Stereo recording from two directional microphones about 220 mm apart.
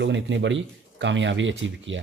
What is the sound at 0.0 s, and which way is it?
Speech, 55° right (ahead or behind).